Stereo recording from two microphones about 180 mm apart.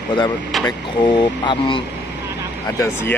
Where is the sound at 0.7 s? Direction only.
25° left (ahead or behind).